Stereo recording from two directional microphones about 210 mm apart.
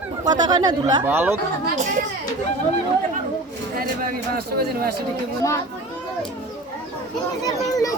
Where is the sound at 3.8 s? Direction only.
45° right (ahead or behind).